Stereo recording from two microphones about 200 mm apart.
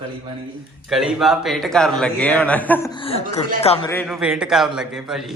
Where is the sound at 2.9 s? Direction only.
25° left (ahead or behind).